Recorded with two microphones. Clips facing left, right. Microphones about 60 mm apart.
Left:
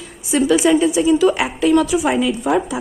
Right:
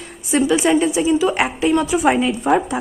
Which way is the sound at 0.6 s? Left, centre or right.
Right.